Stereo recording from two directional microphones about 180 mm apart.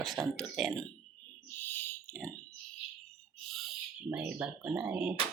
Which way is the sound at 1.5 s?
10° left (ahead or behind).